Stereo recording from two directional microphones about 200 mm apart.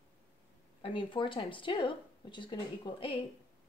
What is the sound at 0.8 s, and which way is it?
Speech, 25° left (ahead or behind).